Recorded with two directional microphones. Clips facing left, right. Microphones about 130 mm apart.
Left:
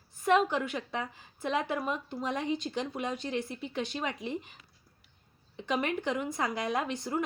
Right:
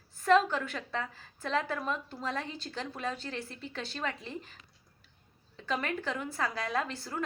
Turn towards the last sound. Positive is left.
turn(degrees=15)  # may be behind; listen again after turning